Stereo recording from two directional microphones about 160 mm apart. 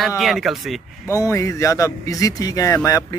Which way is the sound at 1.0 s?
20° left (ahead or behind).